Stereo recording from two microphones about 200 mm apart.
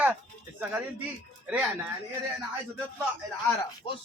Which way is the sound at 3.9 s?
25° left (ahead or behind).